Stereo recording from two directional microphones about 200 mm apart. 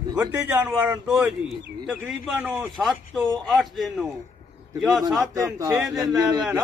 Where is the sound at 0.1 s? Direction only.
10° right (ahead or behind).